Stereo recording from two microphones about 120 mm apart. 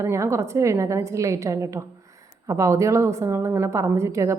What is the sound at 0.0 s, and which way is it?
A woman's voice, 25° right (ahead or behind).